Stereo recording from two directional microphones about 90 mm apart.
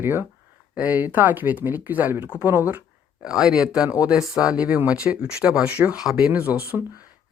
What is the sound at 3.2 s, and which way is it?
Speech, 5° right (ahead or behind).